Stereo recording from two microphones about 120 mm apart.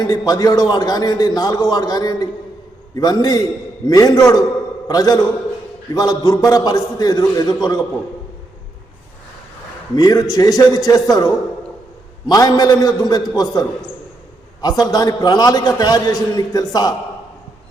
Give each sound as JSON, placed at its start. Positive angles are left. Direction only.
{"t": 0.0, "sound": "a man's voice", "side_deg": 30}
{"t": 9.9, "sound": "a man's voice", "side_deg": 35}
{"t": 12.3, "sound": "a man's voice", "side_deg": 30}